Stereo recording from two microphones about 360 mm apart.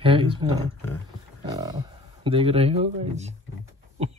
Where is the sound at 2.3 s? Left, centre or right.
Centre.